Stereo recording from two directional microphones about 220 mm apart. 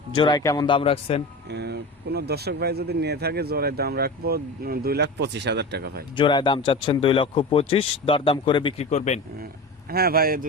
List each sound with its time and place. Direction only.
0.1 s speech: 20° left (ahead or behind)
1.5 s speech: 50° right (ahead or behind)
6.1 s speech: 20° left (ahead or behind)
9.9 s speech: 45° right (ahead or behind)